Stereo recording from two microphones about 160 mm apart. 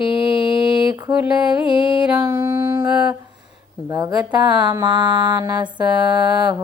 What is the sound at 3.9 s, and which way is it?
Mantra, 20° right (ahead or behind).